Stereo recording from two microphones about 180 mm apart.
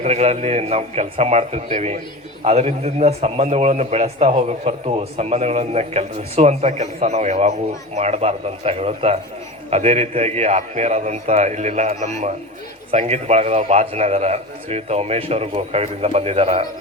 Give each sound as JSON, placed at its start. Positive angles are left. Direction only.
{"t": 0.0, "sound": "a man's voice", "side_deg": -40}